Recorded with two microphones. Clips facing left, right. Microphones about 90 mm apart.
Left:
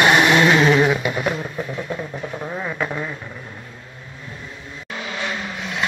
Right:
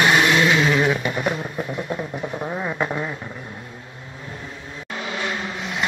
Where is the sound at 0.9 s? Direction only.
5° left (ahead or behind); by 3.1 s 15° right (ahead or behind).